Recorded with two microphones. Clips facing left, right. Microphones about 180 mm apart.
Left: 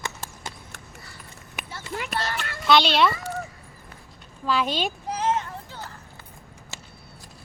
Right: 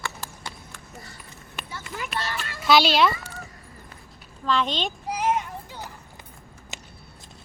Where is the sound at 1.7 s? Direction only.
30° left (ahead or behind).